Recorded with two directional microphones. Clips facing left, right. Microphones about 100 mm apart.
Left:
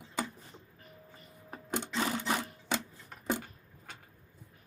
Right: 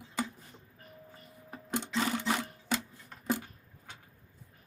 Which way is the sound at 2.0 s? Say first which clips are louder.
Right 1 dB; 20° left (ahead or behind).